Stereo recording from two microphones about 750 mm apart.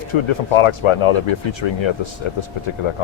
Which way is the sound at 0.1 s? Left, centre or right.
Left.